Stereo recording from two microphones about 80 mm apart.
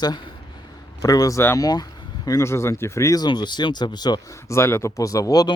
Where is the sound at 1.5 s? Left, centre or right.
Left.